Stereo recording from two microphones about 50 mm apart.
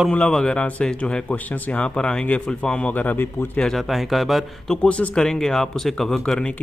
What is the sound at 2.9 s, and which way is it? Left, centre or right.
Speech, left.